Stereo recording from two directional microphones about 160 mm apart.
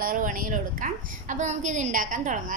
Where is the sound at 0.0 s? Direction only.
60° right (ahead or behind).